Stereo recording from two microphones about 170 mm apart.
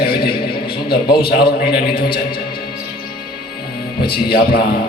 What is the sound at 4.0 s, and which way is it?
Speech, 65° left (ahead or behind).